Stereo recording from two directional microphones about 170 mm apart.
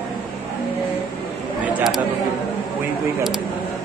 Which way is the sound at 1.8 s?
Centre (ahead or behind).